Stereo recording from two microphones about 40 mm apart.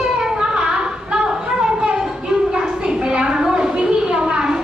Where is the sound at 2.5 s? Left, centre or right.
Right.